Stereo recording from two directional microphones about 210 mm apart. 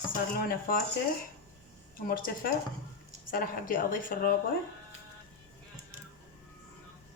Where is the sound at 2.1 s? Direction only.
45° left (ahead or behind).